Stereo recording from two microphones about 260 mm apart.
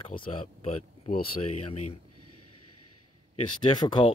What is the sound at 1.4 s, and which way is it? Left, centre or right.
Speech, left.